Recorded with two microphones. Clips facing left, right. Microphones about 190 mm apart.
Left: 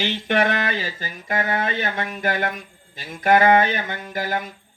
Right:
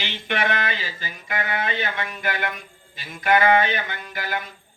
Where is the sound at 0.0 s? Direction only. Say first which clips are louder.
Left 6 dB; 45° left (ahead or behind).